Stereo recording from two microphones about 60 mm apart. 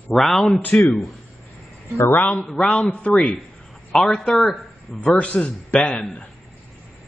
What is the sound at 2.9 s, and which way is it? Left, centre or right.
Speech, left.